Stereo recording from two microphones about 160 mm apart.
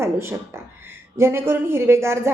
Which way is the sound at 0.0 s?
15° right (ahead or behind).